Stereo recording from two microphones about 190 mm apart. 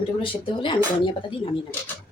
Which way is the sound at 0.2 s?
25° left (ahead or behind).